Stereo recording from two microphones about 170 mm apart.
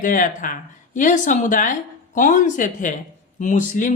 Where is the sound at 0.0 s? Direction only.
50° left (ahead or behind).